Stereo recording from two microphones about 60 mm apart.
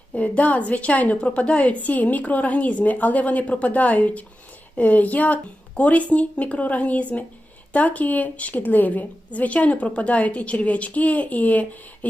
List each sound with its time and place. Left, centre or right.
0.1 s a woman's voice: left